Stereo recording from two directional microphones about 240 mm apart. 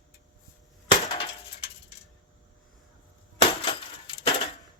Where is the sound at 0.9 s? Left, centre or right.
Left.